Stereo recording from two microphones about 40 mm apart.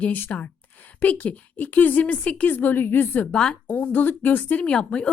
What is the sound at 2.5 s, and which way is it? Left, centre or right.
Speech, left.